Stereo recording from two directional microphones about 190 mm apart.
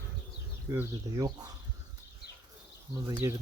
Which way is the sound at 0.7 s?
15° right (ahead or behind).